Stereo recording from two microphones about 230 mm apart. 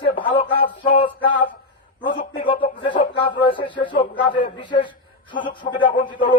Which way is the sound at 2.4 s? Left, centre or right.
Left.